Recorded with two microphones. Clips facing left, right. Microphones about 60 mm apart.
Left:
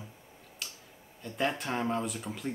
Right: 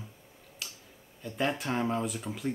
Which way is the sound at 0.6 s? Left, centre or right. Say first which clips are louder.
Even; centre.